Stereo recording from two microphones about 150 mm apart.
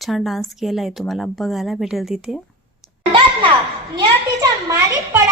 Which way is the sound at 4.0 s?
25° right (ahead or behind).